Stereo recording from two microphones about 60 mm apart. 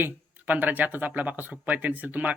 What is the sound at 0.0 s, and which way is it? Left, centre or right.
Speech, right.